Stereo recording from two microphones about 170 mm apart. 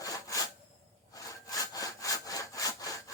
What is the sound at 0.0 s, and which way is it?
Rub, 20° left (ahead or behind).